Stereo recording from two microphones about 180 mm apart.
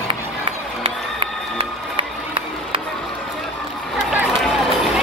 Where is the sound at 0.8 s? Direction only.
30° right (ahead or behind).